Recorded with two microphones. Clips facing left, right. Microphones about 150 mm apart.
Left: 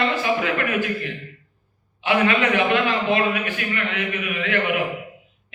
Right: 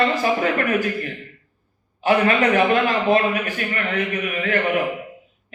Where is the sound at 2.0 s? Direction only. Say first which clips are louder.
Right 2 dB; 40° right (ahead or behind).